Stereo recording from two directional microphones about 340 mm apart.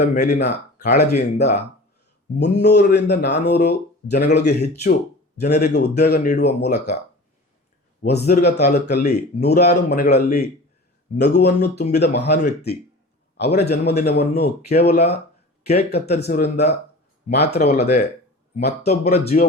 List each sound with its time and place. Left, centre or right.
0.0 s speech: left
2.4 s speech: left
8.0 s speech: left
17.5 s speech: centre